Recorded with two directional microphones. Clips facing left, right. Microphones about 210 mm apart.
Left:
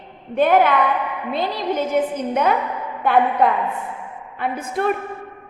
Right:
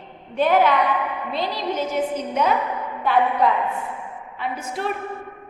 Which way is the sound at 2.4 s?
55° left (ahead or behind).